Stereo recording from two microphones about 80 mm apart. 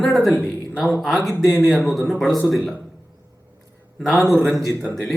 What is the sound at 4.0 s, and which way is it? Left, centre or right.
Speech, centre.